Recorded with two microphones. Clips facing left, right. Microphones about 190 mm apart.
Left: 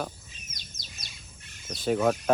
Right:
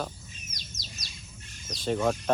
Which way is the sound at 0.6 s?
55° left (ahead or behind).